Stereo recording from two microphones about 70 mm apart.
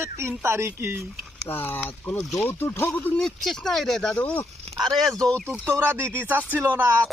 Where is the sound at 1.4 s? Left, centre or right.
Left.